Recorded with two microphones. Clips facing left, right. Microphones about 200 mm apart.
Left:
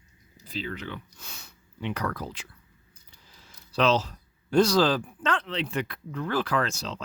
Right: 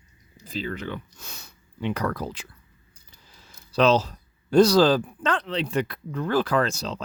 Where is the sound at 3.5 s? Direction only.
40° right (ahead or behind).